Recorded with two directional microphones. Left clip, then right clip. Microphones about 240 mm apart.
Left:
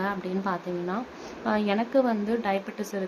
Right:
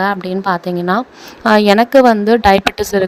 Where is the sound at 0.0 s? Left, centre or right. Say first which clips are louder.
Right 13 dB; right.